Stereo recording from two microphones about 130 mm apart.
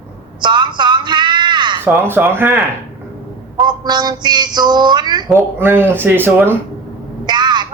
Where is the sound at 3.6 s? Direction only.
35° right (ahead or behind).